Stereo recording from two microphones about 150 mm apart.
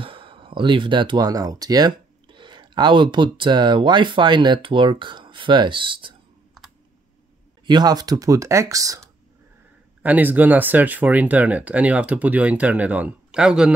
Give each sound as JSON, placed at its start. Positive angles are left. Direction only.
{"t": 0.0, "sound": "speech", "side_deg": -35}
{"t": 7.6, "sound": "speech", "side_deg": -25}
{"t": 10.0, "sound": "speech", "side_deg": -10}